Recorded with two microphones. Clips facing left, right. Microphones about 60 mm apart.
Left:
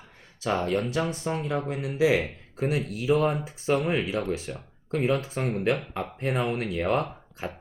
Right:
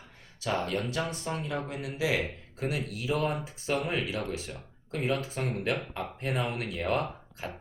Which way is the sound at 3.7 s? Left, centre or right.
Left.